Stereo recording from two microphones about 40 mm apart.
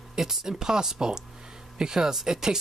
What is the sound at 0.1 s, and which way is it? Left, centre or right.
Speech, centre.